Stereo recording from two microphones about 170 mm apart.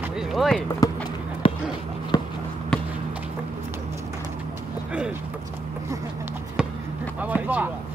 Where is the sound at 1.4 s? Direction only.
30° left (ahead or behind).